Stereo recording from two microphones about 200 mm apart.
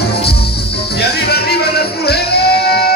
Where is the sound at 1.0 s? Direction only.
50° left (ahead or behind).